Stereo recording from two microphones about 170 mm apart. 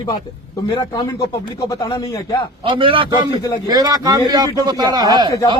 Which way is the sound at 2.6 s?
30° right (ahead or behind).